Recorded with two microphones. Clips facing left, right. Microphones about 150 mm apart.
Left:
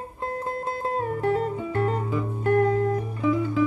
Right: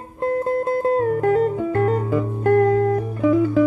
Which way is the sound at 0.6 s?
55° right (ahead or behind).